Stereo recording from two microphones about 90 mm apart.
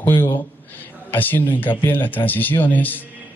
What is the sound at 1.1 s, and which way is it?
A man's voice, 20° left (ahead or behind).